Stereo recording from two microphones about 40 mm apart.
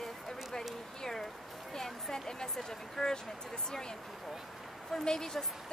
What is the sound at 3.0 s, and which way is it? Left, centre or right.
Speech, centre.